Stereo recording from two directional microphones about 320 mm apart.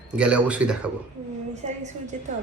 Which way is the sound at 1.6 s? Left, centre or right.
Centre.